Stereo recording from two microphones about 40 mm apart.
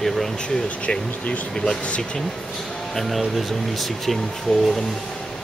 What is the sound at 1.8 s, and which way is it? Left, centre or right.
Speech, left.